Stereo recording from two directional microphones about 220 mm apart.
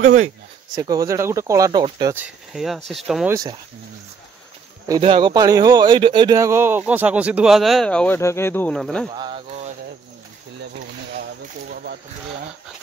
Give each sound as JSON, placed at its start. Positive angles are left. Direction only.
{"t": 0.0, "sound": "speech", "side_deg": -35}
{"t": 0.7, "sound": "speech", "side_deg": -15}
{"t": 2.5, "sound": "speech", "side_deg": 0}
{"t": 4.8, "sound": "speech", "side_deg": -20}
{"t": 9.1, "sound": "speech", "side_deg": -20}
{"t": 11.7, "sound": "a sound", "side_deg": -45}